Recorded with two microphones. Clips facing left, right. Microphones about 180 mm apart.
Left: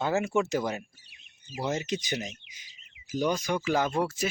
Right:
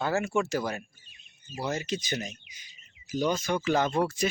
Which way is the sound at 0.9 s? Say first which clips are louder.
Left 1 dB; 80° left.